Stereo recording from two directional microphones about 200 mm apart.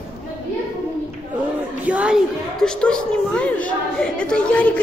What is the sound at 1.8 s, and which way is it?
A woman's voice, 5° right (ahead or behind).